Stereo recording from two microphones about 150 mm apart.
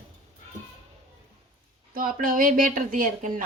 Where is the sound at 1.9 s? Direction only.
65° right (ahead or behind).